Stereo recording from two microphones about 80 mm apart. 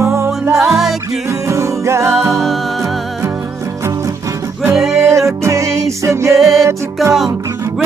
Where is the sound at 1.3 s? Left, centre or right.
Right.